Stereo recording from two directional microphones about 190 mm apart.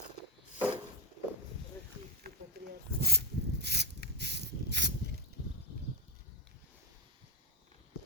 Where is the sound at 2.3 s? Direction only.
55° right (ahead or behind).